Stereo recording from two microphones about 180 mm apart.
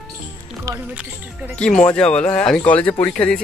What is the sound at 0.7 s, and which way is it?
Speech, 20° right (ahead or behind).